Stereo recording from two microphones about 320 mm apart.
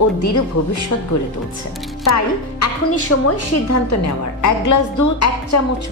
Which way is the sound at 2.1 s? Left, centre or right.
Left.